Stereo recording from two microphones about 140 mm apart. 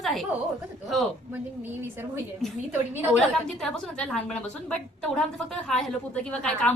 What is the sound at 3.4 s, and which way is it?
A woman's voice, 5° left (ahead or behind).